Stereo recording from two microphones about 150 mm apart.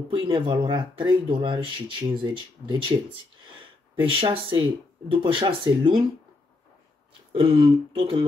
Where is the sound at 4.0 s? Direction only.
35° right (ahead or behind).